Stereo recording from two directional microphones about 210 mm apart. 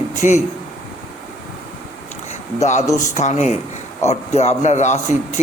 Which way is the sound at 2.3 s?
35° left (ahead or behind).